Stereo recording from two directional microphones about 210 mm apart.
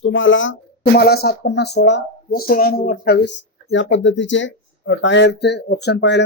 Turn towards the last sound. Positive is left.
turn(degrees=55)  # may be behind; listen again after turning